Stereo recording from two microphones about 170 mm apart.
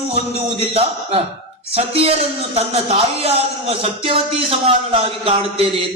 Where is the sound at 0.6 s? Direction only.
35° right (ahead or behind).